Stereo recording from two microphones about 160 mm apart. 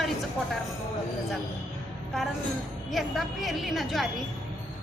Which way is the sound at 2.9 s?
Centre (ahead or behind).